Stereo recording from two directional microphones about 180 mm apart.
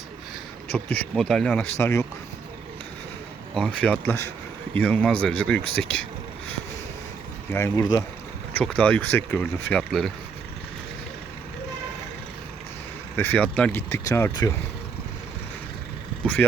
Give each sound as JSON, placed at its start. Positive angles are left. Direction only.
{"t": 0.7, "sound": "speech", "side_deg": 10}
{"t": 1.8, "sound": "speech", "side_deg": 15}
{"t": 3.5, "sound": "speech", "side_deg": 5}
{"t": 7.5, "sound": "speech", "side_deg": 15}
{"t": 8.5, "sound": "speech", "side_deg": 10}
{"t": 13.1, "sound": "speech", "side_deg": 10}
{"t": 16.2, "sound": "speech", "side_deg": 10}